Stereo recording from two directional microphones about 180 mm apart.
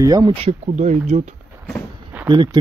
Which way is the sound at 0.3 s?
35° right (ahead or behind).